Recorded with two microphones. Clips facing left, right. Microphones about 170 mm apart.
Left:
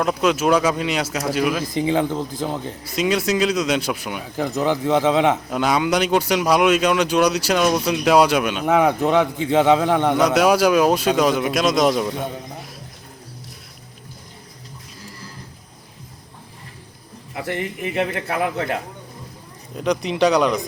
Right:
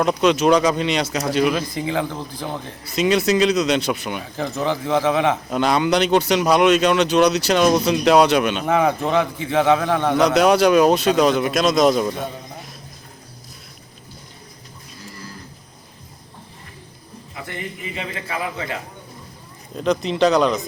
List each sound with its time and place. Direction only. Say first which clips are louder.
0.0 s a man's voice: right 2 dB; 5° left (ahead or behind)
1.9 s a man's voice: left 4 dB; 15° left (ahead or behind)
17.3 s a man's voice: left 6 dB; 80° left; by 18.8 s 60° left (ahead or behind)
19.7 s a man's voice: right 1 dB; 10° left (ahead or behind)